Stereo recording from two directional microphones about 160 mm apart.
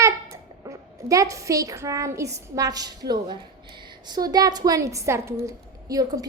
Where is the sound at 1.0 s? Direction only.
20° right (ahead or behind).